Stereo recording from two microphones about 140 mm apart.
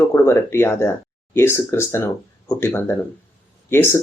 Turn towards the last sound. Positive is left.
turn(degrees=15)  # may be behind; listen again after turning